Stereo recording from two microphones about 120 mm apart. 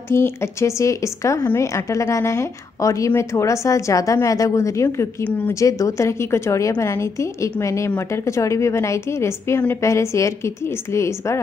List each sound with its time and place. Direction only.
0.1 s a woman's voice: 20° left (ahead or behind)
5.5 s a woman's voice: 25° left (ahead or behind)